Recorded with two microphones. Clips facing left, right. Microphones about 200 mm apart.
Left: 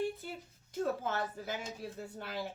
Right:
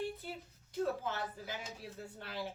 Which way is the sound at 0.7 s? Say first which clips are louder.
Left 2 dB; 45° left (ahead or behind).